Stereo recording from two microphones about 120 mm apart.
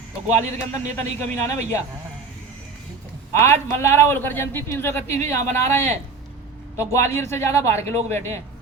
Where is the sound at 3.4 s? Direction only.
20° left (ahead or behind).